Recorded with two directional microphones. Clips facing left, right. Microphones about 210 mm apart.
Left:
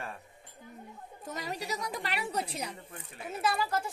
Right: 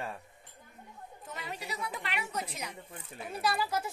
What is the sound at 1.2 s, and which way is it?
A woman's voice, 40° left (ahead or behind).